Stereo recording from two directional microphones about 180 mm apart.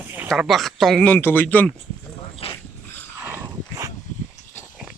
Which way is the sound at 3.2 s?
10° right (ahead or behind).